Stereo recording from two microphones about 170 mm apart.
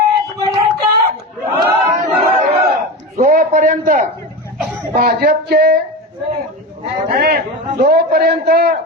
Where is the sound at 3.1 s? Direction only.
50° right (ahead or behind).